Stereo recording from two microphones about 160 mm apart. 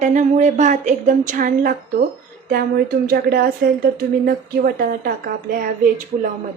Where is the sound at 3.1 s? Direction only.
75° right (ahead or behind); by 5.6 s 60° right (ahead or behind).